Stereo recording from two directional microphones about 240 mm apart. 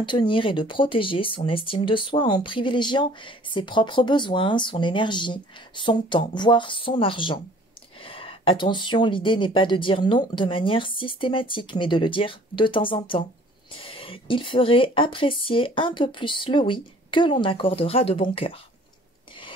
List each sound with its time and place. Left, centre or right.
0.0 s speech: centre